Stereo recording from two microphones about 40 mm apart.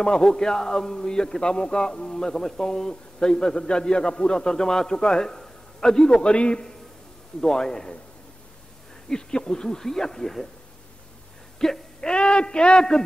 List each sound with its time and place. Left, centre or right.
0.0 s a man's voice: centre
7.3 s a man's voice: centre
9.1 s a man's voice: centre
11.6 s a man's voice: centre